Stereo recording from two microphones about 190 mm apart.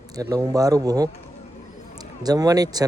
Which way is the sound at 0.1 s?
20° right (ahead or behind).